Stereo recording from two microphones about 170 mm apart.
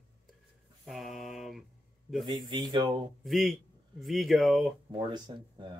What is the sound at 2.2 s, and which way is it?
Speech, 25° right (ahead or behind).